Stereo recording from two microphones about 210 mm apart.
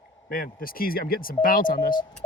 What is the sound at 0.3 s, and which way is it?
Speech, 40° left (ahead or behind).